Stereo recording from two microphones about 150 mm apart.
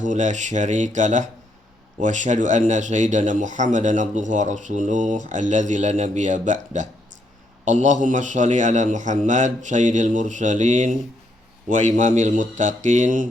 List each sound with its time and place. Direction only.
0.0 s a man's voice: 55° right (ahead or behind)